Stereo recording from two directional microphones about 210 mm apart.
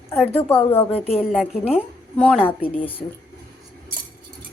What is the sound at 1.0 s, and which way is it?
Speech, 30° left (ahead or behind).